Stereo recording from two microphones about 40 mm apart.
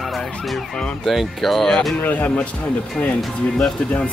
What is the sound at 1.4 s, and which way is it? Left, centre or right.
Speech, centre.